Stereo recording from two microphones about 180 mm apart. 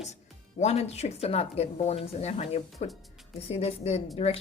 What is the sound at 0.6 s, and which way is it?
Speech, 35° left (ahead or behind).